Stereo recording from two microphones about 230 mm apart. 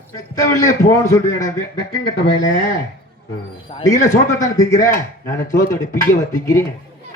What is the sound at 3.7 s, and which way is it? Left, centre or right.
Speech, left.